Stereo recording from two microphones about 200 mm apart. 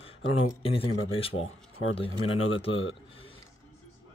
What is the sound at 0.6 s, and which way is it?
Speech, 30° left (ahead or behind).